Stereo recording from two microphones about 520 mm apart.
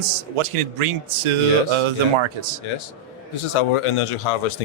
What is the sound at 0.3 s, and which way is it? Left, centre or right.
Speech, right.